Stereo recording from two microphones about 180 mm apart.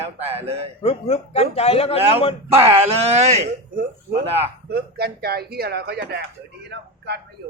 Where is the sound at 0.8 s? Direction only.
35° left (ahead or behind).